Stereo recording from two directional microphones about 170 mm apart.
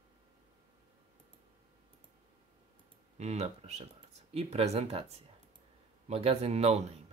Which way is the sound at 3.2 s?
40° right (ahead or behind).